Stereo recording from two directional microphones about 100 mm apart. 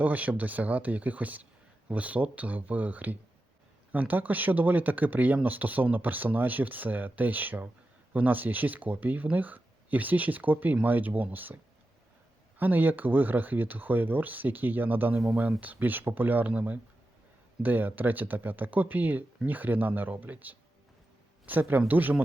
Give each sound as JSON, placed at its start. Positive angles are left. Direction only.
{"t": 0.0, "sound": "speech", "side_deg": -15}
{"t": 15.1, "sound": "speech", "side_deg": 0}
{"t": 15.6, "sound": "speech", "side_deg": -15}